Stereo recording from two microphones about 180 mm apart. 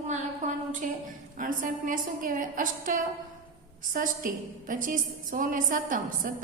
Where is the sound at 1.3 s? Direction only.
50° right (ahead or behind).